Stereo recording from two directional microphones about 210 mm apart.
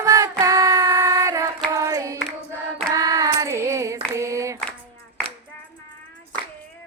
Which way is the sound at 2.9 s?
15° right (ahead or behind).